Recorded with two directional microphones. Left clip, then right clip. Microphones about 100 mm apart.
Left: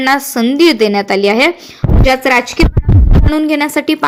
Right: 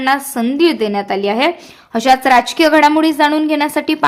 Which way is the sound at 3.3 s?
20° left (ahead or behind).